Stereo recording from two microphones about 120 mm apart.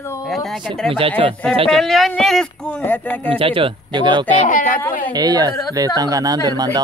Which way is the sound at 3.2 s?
50° right (ahead or behind).